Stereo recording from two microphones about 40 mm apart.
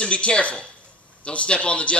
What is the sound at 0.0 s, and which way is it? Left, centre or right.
A man's voice, left.